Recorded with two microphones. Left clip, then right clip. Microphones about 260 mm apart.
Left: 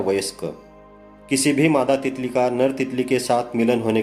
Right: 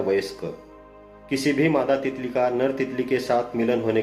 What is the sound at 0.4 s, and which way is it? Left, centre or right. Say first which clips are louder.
Speech: left 3 dB; left.